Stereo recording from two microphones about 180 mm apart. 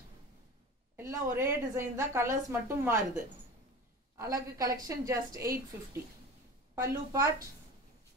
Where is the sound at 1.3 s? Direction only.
15° right (ahead or behind).